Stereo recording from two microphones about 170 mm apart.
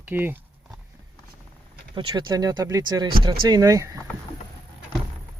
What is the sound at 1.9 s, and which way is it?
Speech, 25° right (ahead or behind).